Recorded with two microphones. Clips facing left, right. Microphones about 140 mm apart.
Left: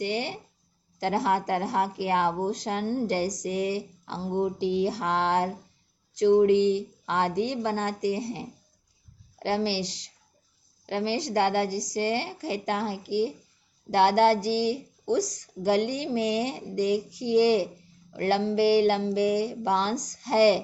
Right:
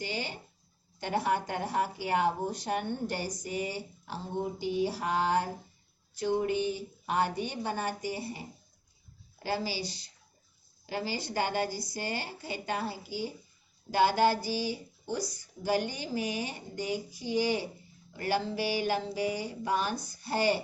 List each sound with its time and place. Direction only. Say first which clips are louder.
0.0 s speech: left 7 dB; 70° left (ahead or behind)
0.9 s speech: left 5 dB; 90° left
10.8 s speech: left 7 dB; 80° left
13.9 s speech: left 5 dB; 80° left